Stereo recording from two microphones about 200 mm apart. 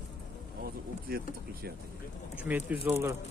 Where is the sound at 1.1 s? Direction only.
50° right (ahead or behind).